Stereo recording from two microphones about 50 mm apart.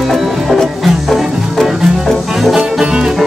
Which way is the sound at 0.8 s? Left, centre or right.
Centre.